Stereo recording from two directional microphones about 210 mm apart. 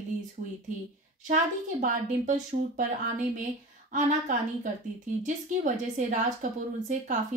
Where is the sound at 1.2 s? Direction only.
35° right (ahead or behind).